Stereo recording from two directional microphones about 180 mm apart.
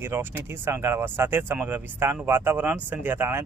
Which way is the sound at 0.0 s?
15° right (ahead or behind).